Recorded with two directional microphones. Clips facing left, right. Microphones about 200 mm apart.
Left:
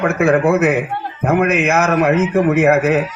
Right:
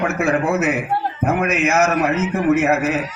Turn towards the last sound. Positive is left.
turn(degrees=60)  # may be behind; listen again after turning